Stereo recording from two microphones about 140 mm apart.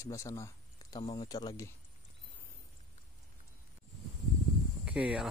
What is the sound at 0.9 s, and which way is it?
Speech, 35° left (ahead or behind).